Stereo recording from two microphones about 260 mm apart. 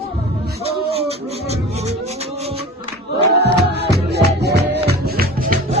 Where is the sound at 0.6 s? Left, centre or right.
Right.